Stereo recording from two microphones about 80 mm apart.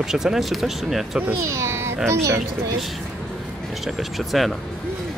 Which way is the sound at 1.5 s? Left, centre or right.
Right.